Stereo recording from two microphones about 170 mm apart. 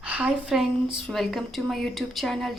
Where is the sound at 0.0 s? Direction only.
5° right (ahead or behind).